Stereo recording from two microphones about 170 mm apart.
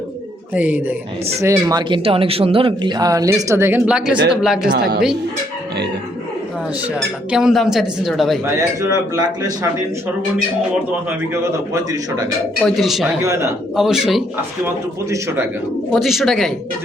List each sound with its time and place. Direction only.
0.5 s speech: 10° right (ahead or behind)
4.8 s a woman's voice: 65° right (ahead or behind)
6.8 s speech: 5° right (ahead or behind)
8.4 s speech: 20° right (ahead or behind)
11.7 s speech: 20° right (ahead or behind)
12.6 s speech: centre (ahead or behind)
13.2 s speech: 15° right (ahead or behind)
13.7 s speech: centre (ahead or behind)
15.1 s speech: 15° right (ahead or behind)
15.9 s speech: centre (ahead or behind)